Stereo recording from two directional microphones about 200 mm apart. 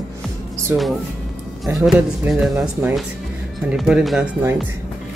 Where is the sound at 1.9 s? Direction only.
5° right (ahead or behind).